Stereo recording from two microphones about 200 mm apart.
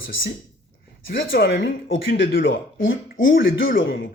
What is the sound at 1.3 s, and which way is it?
Speech, 50° left (ahead or behind).